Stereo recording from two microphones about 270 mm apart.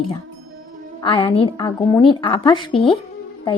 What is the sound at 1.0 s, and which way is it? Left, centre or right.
A woman's voice, centre.